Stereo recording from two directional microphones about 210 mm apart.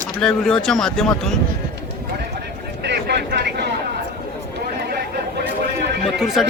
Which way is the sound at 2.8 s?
50° right (ahead or behind).